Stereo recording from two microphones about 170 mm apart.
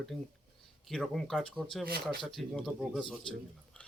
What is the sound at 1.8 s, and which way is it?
Speech, 65° right (ahead or behind).